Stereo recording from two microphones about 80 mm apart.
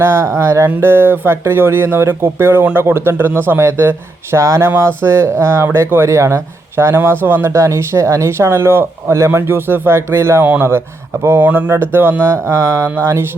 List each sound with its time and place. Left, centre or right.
0.0 s speech: right
11.4 s speech: centre
11.8 s speech: right